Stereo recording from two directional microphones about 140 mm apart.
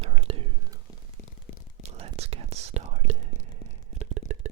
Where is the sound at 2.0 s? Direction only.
45° right (ahead or behind).